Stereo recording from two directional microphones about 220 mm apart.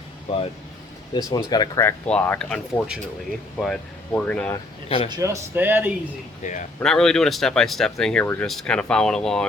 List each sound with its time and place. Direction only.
0.3 s speech: 25° left (ahead or behind); by 4.5 s 5° left (ahead or behind)
4.5 s speech: 25° left (ahead or behind)
5.0 s speech: 15° right (ahead or behind)
6.4 s speech: 35° left (ahead or behind)
6.7 s speech: 5° left (ahead or behind)